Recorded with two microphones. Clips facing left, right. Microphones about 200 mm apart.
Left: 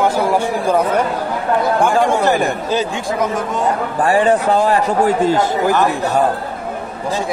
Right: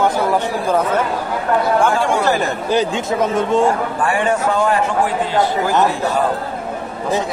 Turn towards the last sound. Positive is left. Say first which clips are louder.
# left 3 dB
turn(degrees=45)  # may be behind; listen again after turning